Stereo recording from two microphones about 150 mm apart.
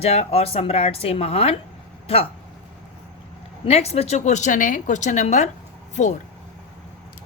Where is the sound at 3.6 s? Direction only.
45° left (ahead or behind).